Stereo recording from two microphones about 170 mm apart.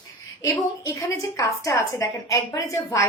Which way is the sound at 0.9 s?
20° left (ahead or behind).